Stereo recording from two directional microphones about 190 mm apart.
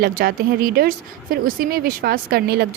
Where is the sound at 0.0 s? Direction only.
50° right (ahead or behind).